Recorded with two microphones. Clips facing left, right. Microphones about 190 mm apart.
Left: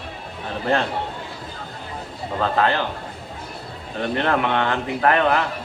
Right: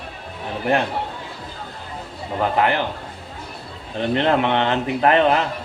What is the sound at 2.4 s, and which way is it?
Speech, 15° right (ahead or behind).